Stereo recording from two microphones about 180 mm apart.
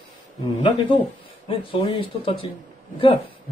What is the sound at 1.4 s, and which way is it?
Speech, 30° left (ahead or behind).